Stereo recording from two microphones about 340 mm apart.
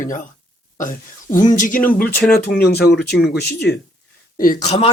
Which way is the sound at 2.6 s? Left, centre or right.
Left.